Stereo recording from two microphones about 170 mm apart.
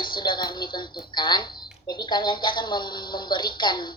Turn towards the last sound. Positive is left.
turn(degrees=25)  # may be behind; listen again after turning